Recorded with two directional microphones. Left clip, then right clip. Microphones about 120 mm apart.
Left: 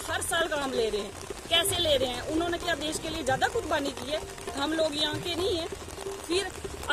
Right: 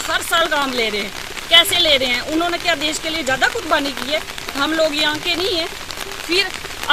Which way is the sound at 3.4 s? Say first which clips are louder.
Right 10 dB; 45° left (ahead or behind).